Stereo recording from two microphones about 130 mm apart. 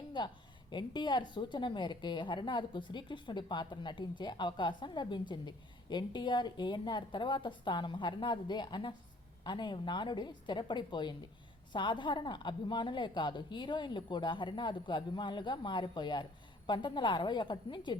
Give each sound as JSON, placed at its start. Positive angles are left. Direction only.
{"t": 0.2, "sound": "a woman's voice", "side_deg": 35}